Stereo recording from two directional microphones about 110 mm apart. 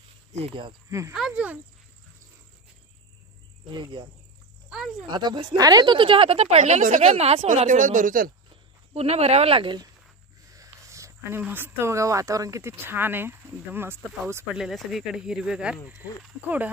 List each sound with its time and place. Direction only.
0.8 s speech: 30° right (ahead or behind)
1.3 s speech: 15° right (ahead or behind)
3.7 s speech: 45° right (ahead or behind)
4.6 s a sound: 5° right (ahead or behind)
5.1 s speech: 40° right (ahead or behind); by 7.7 s 70° right (ahead or behind)
8.9 s speech: 75° right (ahead or behind); by 9.8 s 50° right (ahead or behind)
10.5 s speech: 30° right (ahead or behind)
14.5 s speech: 5° right (ahead or behind)